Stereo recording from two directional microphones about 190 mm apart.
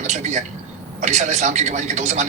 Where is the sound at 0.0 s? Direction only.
35° right (ahead or behind).